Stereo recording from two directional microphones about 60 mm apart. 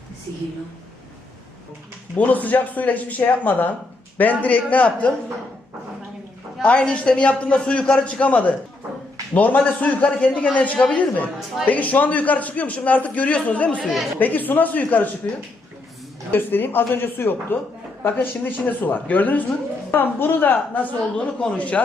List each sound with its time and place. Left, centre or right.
2.1 s a man's voice: left
6.6 s a man's voice: left
16.3 s a man's voice: left
21.2 s a man's voice: centre